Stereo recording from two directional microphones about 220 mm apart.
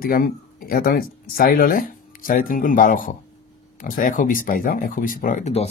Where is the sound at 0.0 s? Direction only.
40° left (ahead or behind).